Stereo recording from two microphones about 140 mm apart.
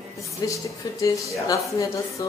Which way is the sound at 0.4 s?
25° left (ahead or behind).